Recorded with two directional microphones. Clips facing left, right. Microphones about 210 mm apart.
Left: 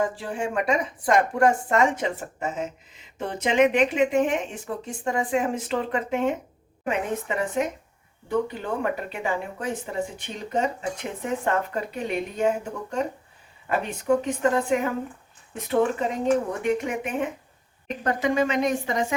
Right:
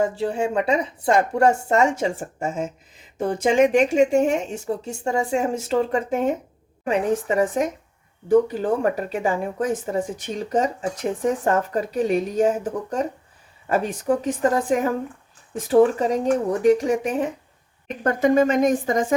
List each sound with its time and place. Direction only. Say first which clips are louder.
0.0 s a woman's voice: right 5 dB; 25° right (ahead or behind)
2.1 s speech: right 3 dB; 45° right (ahead or behind)
4.6 s a woman's voice: right 4 dB; 25° right (ahead or behind)
5.5 s speech: right 5 dB; 45° right (ahead or behind)
13.7 s speech: right 2 dB; 40° right (ahead or behind)
18.0 s speech: right 6 dB; 50° right (ahead or behind)